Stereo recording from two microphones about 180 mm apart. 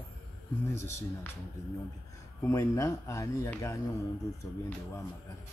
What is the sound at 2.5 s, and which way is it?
Speech, 20° left (ahead or behind).